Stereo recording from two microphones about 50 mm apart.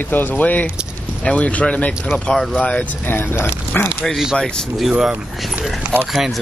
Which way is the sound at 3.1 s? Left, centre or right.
Left.